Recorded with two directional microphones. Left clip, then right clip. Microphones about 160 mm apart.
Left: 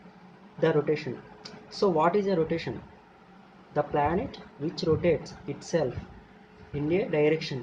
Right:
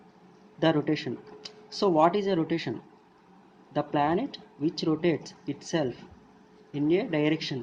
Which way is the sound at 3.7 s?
65° right (ahead or behind).